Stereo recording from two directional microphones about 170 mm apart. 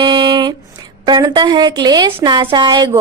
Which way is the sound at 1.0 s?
25° right (ahead or behind).